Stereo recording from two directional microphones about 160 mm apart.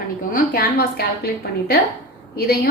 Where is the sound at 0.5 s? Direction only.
70° left (ahead or behind).